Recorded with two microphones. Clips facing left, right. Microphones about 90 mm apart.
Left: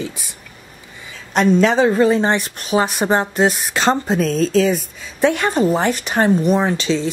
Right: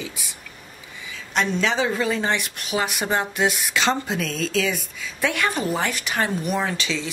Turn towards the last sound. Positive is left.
turn(degrees=35)  # may be behind; listen again after turning